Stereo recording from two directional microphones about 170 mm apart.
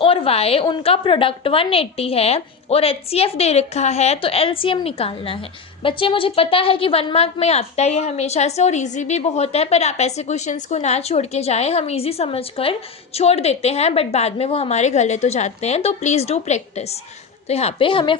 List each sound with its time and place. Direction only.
0.0 s a woman's voice: 30° left (ahead or behind)